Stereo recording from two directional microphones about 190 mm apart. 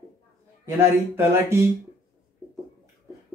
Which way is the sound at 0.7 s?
10° right (ahead or behind).